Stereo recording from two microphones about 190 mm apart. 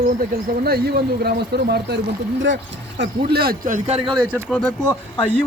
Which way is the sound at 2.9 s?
55° right (ahead or behind).